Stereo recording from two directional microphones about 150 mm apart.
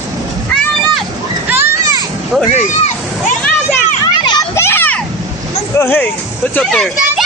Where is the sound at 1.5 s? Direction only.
15° right (ahead or behind).